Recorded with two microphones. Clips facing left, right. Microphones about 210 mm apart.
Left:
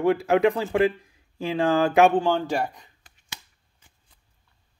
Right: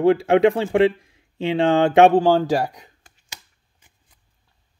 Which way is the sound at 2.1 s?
35° right (ahead or behind).